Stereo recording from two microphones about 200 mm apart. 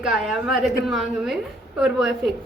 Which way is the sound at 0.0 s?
Centre (ahead or behind).